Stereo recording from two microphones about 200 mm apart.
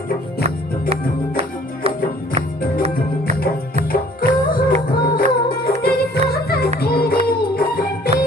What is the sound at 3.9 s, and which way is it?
Music, 45° left (ahead or behind).